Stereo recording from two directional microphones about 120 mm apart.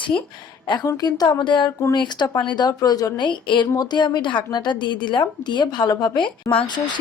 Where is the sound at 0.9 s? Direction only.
35° left (ahead or behind).